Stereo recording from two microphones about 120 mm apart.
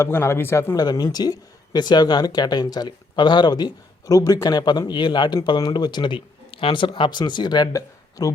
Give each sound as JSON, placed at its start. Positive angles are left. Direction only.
{"t": 0.0, "sound": "a man's voice", "side_deg": 20}
{"t": 0.9, "sound": "speech", "side_deg": 35}